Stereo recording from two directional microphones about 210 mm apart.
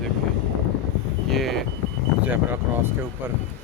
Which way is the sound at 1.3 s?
Centre (ahead or behind).